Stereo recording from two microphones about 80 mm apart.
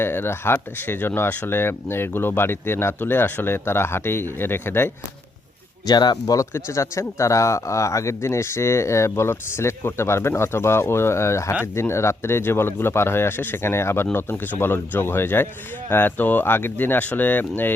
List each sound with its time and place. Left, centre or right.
0.0 s speech: left
5.8 s speech: left
6.5 s speech: left